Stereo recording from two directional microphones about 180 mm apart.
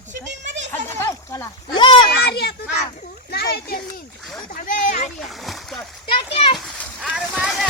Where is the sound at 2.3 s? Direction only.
65° left (ahead or behind).